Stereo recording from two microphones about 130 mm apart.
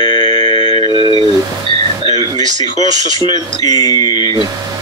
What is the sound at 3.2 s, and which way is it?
Speech, 30° left (ahead or behind).